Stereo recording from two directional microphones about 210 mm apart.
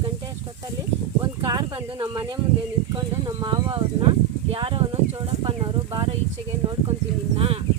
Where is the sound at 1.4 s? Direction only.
20° right (ahead or behind).